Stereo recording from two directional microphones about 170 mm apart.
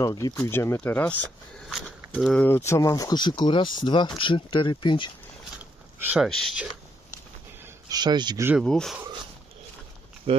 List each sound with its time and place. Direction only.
0.0 s speech: 20° left (ahead or behind)
1.8 s a sound: centre (ahead or behind)
2.4 s speech: 15° left (ahead or behind)
5.9 s speech: 10° right (ahead or behind)
6.2 s speech: centre (ahead or behind)
7.6 s speech: 25° right (ahead or behind)
8.6 s speech: 5° left (ahead or behind)
10.3 s speech: 35° right (ahead or behind)